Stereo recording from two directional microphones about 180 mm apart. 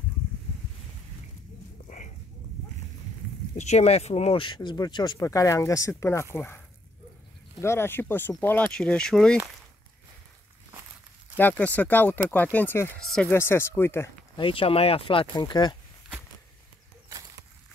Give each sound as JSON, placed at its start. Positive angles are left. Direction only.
{"t": 3.5, "sound": "speech", "side_deg": 40}
{"t": 7.6, "sound": "speech", "side_deg": 15}
{"t": 11.3, "sound": "speech", "side_deg": 10}
{"t": 13.3, "sound": "speech", "side_deg": 15}
{"t": 14.3, "sound": "speech", "side_deg": 30}